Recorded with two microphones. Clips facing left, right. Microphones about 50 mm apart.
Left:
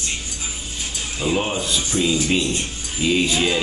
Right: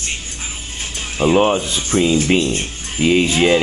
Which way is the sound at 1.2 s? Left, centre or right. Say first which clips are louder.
Right 8 dB; right.